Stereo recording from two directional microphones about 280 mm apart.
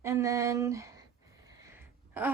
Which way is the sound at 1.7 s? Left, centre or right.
Centre.